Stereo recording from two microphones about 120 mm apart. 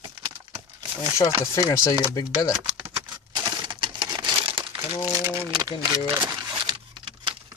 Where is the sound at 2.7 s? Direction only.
40° right (ahead or behind).